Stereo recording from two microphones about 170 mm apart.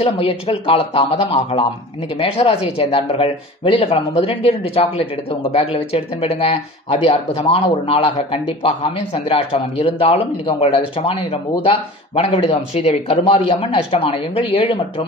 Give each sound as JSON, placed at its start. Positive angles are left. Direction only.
{"t": 0.0, "sound": "speech", "side_deg": 35}